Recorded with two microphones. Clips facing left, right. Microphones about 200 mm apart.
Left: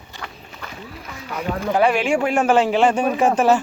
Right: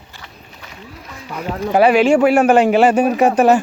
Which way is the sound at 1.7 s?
70° right (ahead or behind).